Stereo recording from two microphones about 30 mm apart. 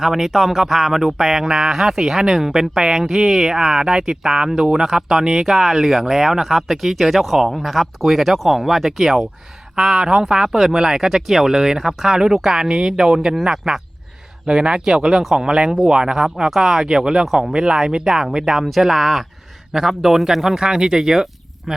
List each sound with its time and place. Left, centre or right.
0.0 s speech: centre
5.3 s speech: centre
9.7 s speech: centre
11.5 s speech: centre
14.4 s speech: right
16.1 s speech: centre
20.4 s speech: centre